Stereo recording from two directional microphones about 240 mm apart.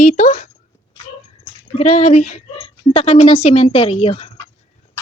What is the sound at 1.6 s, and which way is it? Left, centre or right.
Speech, left.